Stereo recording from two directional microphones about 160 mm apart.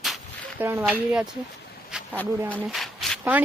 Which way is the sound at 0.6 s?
10° right (ahead or behind).